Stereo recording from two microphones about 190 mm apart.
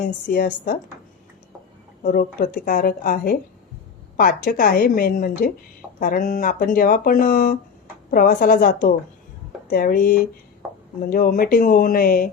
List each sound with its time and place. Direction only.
0.0 s speech: 45° left (ahead or behind)
2.0 s speech: 50° left (ahead or behind)
10.6 s a sound: 10° right (ahead or behind)
11.0 s speech: 50° left (ahead or behind)